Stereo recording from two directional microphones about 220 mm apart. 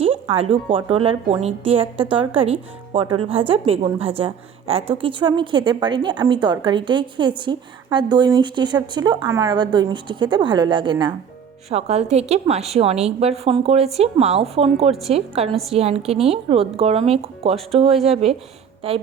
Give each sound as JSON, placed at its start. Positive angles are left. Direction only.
{"t": 0.0, "sound": "a woman's voice", "side_deg": -25}
{"t": 15.4, "sound": "a woman's voice", "side_deg": 0}
{"t": 15.7, "sound": "a woman's voice", "side_deg": -30}